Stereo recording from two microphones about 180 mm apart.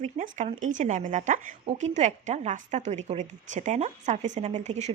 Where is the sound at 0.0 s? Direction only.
40° right (ahead or behind).